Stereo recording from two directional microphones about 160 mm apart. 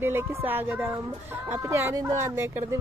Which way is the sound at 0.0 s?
15° right (ahead or behind).